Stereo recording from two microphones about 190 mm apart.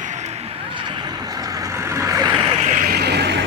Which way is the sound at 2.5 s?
35° right (ahead or behind).